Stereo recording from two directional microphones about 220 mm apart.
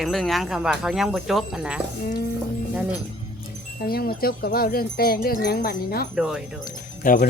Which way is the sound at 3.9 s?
45° left (ahead or behind).